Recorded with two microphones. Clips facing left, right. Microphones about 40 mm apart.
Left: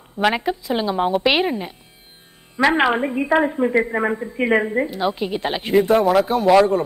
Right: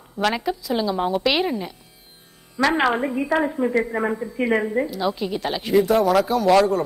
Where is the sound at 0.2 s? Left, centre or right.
Left.